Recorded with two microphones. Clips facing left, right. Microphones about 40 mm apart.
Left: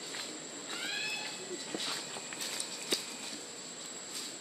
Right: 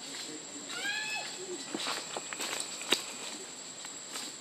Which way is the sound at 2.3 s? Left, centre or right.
Right.